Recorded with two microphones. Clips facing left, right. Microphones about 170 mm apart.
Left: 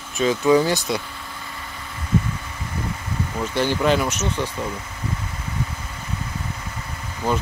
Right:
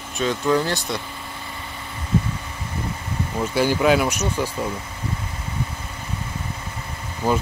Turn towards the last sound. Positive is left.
turn(degrees=-10)  # may be behind; listen again after turning